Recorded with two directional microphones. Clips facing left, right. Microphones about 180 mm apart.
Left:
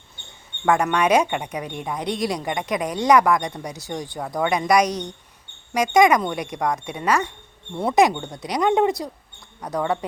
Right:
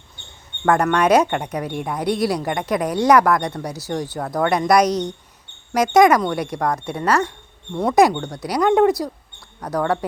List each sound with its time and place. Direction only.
0.6 s speech: 10° left (ahead or behind)
1.7 s speech: 10° right (ahead or behind)
2.1 s speech: 15° left (ahead or behind)